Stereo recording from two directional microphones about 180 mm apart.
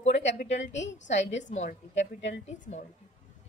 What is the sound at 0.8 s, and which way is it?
Speech, 90° left.